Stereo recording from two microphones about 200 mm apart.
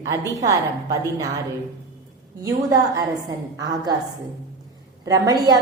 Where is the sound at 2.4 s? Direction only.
15° right (ahead or behind).